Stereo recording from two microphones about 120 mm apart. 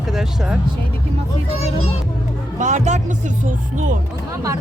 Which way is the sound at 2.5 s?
85° right.